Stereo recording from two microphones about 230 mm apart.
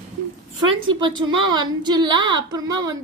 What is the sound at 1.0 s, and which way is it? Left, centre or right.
A woman's voice, right.